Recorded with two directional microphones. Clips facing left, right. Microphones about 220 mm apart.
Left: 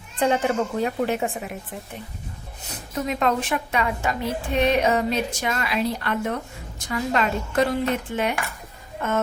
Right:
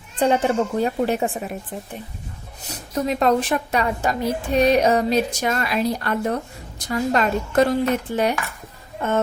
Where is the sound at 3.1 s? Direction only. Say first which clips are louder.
Right 4 dB; 35° right (ahead or behind).